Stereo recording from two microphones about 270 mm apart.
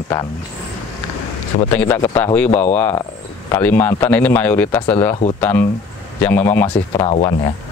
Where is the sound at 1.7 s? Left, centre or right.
Centre.